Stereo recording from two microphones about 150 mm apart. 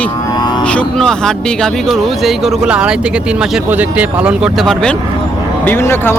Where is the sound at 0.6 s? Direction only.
10° left (ahead or behind).